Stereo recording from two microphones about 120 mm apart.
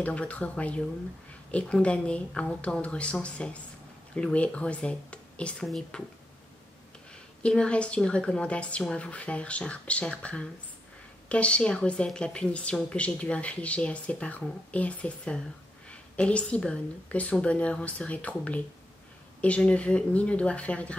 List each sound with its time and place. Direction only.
0.0 s a woman's voice: 10° left (ahead or behind)
7.4 s a woman's voice: 10° left (ahead or behind)